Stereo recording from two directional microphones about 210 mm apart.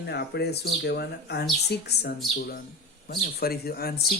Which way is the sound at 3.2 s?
45° left (ahead or behind).